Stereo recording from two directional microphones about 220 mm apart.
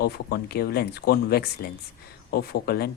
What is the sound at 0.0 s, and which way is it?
A man's voice, 45° left (ahead or behind).